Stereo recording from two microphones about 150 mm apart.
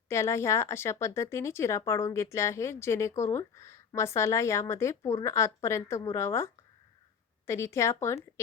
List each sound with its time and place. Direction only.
0.1 s speech: 20° left (ahead or behind)